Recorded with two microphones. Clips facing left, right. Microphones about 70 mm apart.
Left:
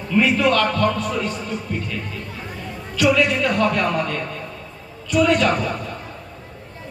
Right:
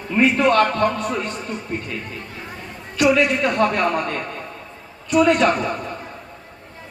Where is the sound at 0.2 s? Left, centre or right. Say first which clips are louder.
Right 2 dB; right.